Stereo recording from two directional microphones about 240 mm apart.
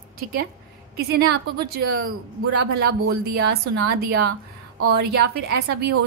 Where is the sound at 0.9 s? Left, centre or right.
Right.